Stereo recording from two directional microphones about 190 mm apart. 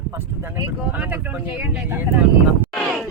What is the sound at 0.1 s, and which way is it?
Speech, 10° right (ahead or behind).